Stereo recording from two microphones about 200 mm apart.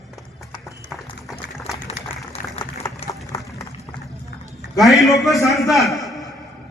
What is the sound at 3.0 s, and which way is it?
Run, 30° left (ahead or behind).